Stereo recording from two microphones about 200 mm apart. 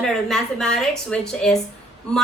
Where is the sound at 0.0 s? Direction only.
Centre (ahead or behind).